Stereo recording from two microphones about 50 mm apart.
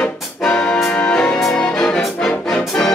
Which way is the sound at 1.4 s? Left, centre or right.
Centre.